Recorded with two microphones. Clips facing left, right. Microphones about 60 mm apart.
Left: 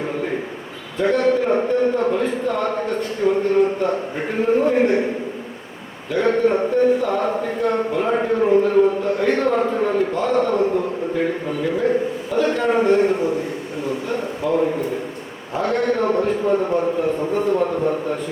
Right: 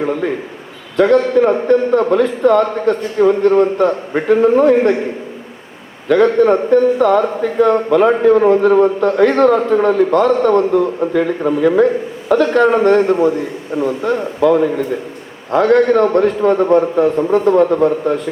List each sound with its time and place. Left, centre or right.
0.9 s a man's voice: right
6.1 s a man's voice: right